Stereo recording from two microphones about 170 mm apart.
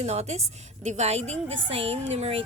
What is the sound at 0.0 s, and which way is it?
A woman's voice, 40° right (ahead or behind).